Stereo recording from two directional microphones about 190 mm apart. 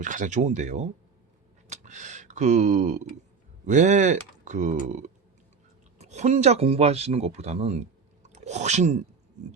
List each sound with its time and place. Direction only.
0.0 s speech: 40° right (ahead or behind)
1.6 s a sound: 40° right (ahead or behind)
3.7 s speech: 40° right (ahead or behind)